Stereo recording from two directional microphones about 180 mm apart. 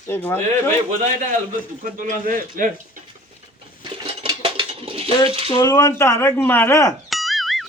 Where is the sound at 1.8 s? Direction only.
45° right (ahead or behind).